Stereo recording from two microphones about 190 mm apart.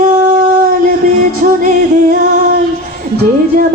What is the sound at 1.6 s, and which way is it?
Music, 45° right (ahead or behind).